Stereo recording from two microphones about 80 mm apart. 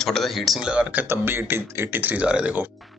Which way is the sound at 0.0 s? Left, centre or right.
Centre.